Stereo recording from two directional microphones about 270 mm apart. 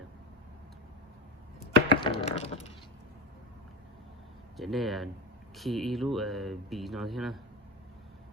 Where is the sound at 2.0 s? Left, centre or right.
Centre.